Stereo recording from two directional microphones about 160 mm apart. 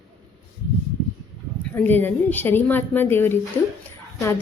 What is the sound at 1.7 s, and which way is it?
A woman's voice, 10° left (ahead or behind).